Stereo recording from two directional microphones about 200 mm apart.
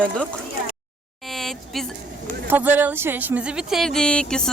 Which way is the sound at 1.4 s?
Centre (ahead or behind).